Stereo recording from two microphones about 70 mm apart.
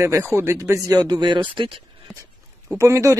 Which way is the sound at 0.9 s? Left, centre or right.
Right.